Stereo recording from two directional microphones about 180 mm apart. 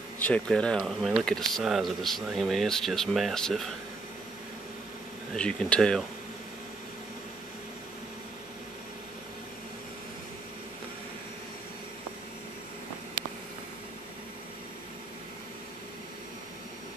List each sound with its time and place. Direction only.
0.2 s speech: 5° left (ahead or behind)
5.3 s speech: 5° left (ahead or behind)